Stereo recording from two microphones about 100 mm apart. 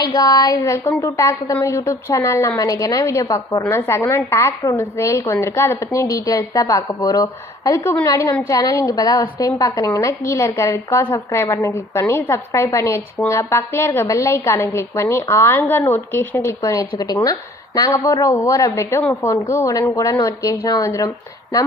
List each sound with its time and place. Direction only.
0.2 s speech: 45° left (ahead or behind)
0.6 s a woman's voice: 30° left (ahead or behind)
20.1 s a woman's voice: 35° left (ahead or behind)